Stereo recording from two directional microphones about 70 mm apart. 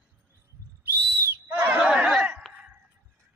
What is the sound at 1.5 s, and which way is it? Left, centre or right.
Chatter, right.